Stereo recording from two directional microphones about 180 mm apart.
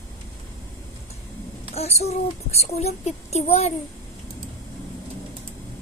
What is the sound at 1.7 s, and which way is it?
Speech, 35° left (ahead or behind).